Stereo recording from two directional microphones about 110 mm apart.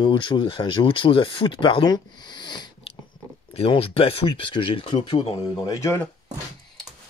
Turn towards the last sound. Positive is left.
turn(degrees=25)  # may be behind; listen again after turning